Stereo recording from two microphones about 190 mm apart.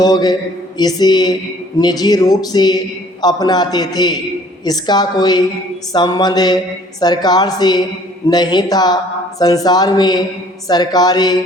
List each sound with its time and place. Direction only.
0.0 s a man's voice: 20° left (ahead or behind)